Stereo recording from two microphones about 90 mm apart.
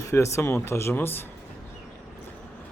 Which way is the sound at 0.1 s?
30° left (ahead or behind).